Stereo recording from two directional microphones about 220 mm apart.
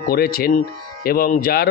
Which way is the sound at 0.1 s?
45° left (ahead or behind).